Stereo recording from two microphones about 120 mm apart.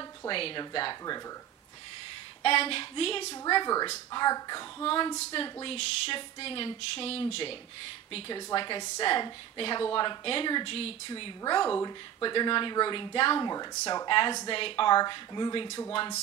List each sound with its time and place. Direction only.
0.3 s speech: 50° left (ahead or behind)
2.4 s speech: 50° left (ahead or behind)
3.4 s speech: 35° left (ahead or behind)
4.8 s speech: 45° left (ahead or behind)
8.3 s speech: 40° left (ahead or behind)
11.1 s speech: 45° left (ahead or behind)
13.5 s speech: 35° left (ahead or behind)